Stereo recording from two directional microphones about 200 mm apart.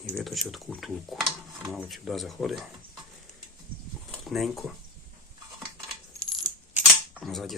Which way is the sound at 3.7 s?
45° right (ahead or behind).